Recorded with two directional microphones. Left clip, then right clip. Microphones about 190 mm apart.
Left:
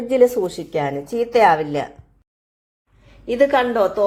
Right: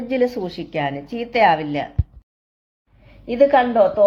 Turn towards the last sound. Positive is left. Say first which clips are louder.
# right 2 dB
turn(degrees=25)  # may be behind; listen again after turning